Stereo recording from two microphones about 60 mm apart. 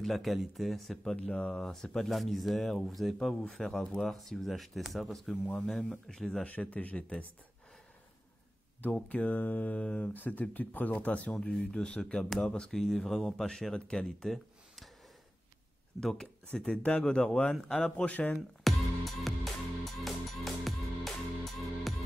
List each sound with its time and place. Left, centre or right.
0.0 s speech: centre
1.1 s speech: centre
6.4 s speech: left
8.9 s speech: left
11.5 s speech: centre
13.7 s speech: centre
14.0 s a sound: centre
16.0 s speech: centre
18.3 s music: centre